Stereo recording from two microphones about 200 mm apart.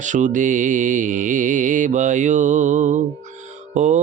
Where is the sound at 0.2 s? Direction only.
40° right (ahead or behind).